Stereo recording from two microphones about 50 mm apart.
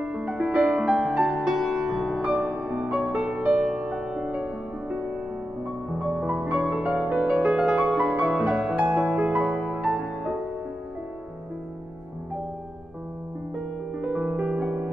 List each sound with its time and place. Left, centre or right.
0.1 s music: right; by 2.9 s centre
2.9 s music: right
3.6 s music: centre; by 5.0 s right
6.2 s music: right
14.1 s music: right